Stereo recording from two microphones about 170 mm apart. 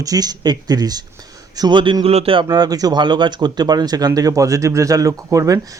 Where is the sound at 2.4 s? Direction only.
20° right (ahead or behind).